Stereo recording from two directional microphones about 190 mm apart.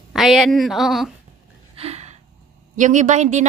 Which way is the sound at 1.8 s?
35° right (ahead or behind).